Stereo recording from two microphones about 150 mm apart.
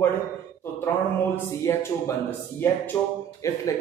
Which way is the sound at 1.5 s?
20° left (ahead or behind).